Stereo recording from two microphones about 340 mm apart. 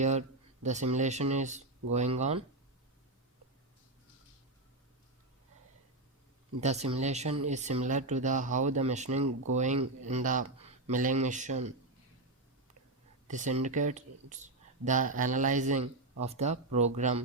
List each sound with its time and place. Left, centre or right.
0.0 s speech: right
6.6 s speech: centre
13.2 s speech: right